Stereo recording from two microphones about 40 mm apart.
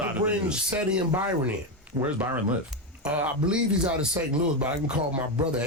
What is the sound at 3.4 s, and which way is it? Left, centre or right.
Speech, right.